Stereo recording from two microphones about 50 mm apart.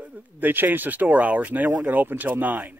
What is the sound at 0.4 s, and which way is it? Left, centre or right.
A man's voice, right.